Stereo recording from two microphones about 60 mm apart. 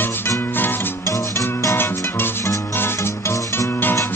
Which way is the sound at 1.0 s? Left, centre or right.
Left.